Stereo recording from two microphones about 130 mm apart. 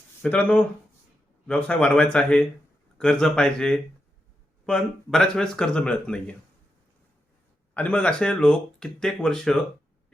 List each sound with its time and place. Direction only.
0.2 s speech: 10° left (ahead or behind)
7.7 s speech: 10° left (ahead or behind)